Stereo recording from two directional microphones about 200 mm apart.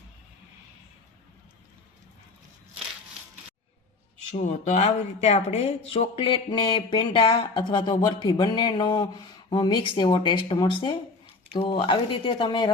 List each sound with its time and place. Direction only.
4.6 s speech: 35° left (ahead or behind)